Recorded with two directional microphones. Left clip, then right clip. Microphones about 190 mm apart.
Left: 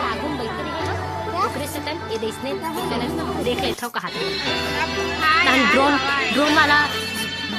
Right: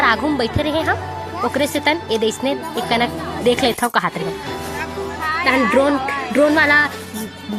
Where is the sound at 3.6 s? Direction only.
45° right (ahead or behind).